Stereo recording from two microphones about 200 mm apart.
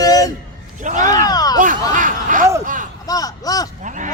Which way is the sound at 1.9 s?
40° right (ahead or behind).